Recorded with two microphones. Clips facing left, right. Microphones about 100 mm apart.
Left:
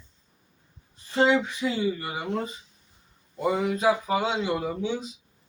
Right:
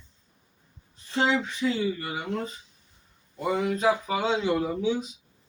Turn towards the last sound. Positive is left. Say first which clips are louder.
# right 2 dB
turn(degrees=0)  # may be behind; listen again after turning